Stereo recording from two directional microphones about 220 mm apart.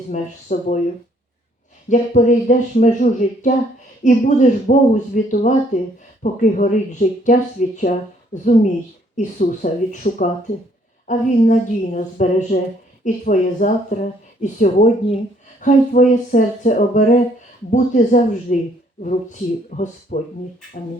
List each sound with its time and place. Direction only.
0.1 s speech: 35° left (ahead or behind)
1.9 s a woman's voice: 35° left (ahead or behind)